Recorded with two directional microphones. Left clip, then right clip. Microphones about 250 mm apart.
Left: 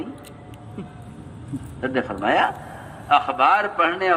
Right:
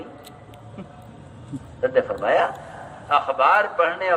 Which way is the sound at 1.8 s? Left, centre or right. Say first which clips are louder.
Right 3 dB; left.